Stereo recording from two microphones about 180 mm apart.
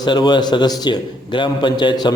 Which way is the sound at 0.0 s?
25° left (ahead or behind).